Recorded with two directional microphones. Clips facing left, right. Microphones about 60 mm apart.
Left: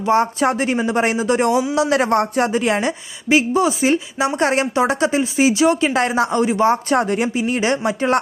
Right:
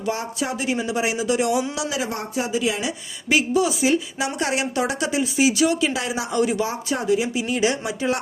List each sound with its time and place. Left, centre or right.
0.1 s speech: left
1.9 s speech: left
3.2 s speech: left
6.4 s speech: left
6.7 s speech: left
7.3 s speech: left